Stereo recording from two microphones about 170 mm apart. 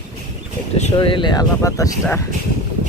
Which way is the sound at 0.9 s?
30° left (ahead or behind).